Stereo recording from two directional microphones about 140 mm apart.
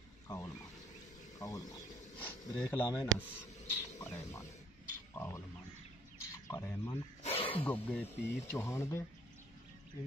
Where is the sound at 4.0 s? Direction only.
20° left (ahead or behind).